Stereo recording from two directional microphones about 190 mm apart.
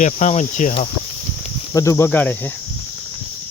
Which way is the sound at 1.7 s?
15° left (ahead or behind).